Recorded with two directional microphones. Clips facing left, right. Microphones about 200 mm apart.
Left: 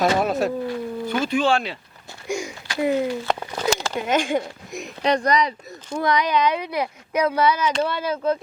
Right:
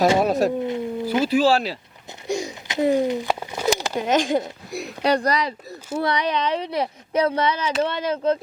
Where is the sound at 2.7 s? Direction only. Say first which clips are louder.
Right 2 dB; 20° right (ahead or behind).